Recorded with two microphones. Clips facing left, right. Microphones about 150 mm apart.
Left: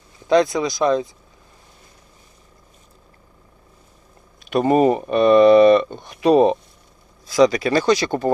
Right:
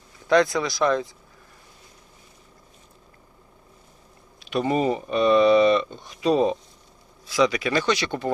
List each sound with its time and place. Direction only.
0.3 s speech: 20° left (ahead or behind)
4.4 s speech: 50° left (ahead or behind)
7.3 s speech: 40° left (ahead or behind)